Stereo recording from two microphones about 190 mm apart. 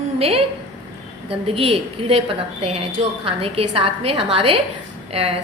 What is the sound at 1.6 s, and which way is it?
A woman's voice, 30° right (ahead or behind).